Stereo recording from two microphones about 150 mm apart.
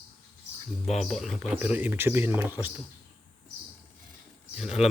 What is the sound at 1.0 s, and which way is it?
A man's voice, centre (ahead or behind).